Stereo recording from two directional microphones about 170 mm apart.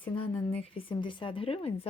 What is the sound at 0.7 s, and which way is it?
Speech, 30° left (ahead or behind).